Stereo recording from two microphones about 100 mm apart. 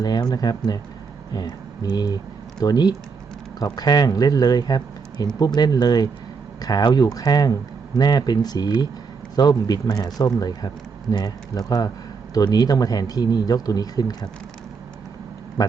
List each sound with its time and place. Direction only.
0.0 s speech: 40° left (ahead or behind)
15.6 s speech: 40° left (ahead or behind)